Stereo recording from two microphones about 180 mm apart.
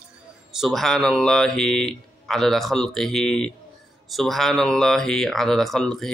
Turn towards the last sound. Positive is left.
turn(degrees=0)  # may be behind; listen again after turning